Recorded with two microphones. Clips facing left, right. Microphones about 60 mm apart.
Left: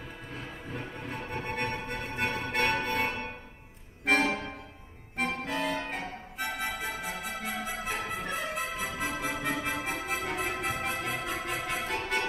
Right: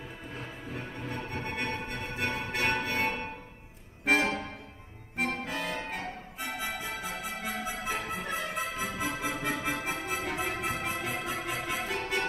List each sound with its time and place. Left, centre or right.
0.7 s music: centre
5.4 s music: centre
9.1 s music: left
9.4 s music: centre
11.0 s organ: centre